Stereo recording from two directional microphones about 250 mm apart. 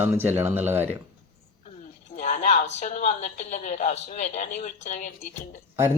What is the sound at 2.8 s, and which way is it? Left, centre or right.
Speech, left.